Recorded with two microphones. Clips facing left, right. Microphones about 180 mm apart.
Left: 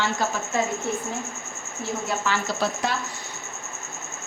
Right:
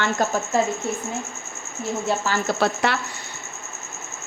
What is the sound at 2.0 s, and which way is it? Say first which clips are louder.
Speech: right 3 dB; 35° right (ahead or behind).